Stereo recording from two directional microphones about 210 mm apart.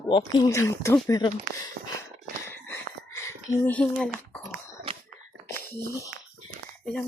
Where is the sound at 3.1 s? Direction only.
15° left (ahead or behind).